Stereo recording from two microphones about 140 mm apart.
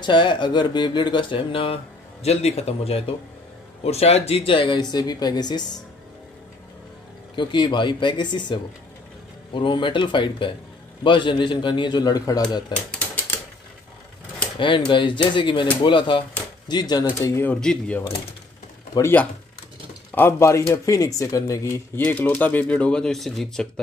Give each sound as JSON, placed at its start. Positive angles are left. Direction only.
{"t": 0.0, "sound": "speech", "side_deg": 35}
{"t": 7.3, "sound": "speech", "side_deg": 35}
{"t": 12.7, "sound": "typewriter", "side_deg": 10}
{"t": 14.6, "sound": "speech", "side_deg": 35}
{"t": 17.6, "sound": "speech", "side_deg": 5}
{"t": 18.9, "sound": "speech", "side_deg": 20}